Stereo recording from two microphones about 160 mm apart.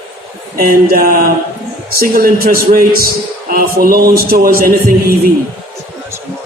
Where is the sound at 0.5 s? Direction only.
65° right (ahead or behind).